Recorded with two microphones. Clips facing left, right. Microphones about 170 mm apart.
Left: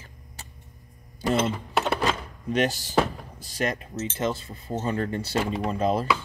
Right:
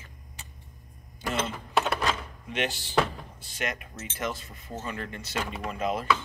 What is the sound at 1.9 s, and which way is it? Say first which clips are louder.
Drawer open or close: left 3 dB; 35° left (ahead or behind).